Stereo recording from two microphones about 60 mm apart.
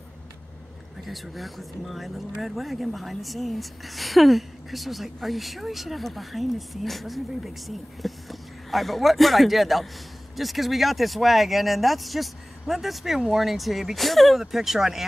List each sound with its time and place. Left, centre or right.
1.0 s a woman's voice: centre